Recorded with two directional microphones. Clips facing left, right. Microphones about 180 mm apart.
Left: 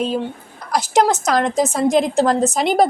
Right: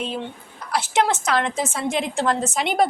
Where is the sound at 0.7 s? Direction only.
40° left (ahead or behind).